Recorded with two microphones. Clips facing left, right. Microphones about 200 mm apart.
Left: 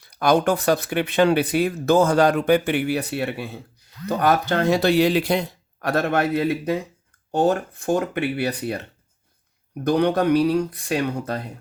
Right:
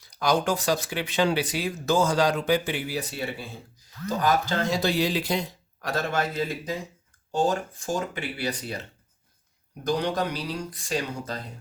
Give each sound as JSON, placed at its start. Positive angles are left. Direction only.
{"t": 0.0, "sound": "speech", "side_deg": 60}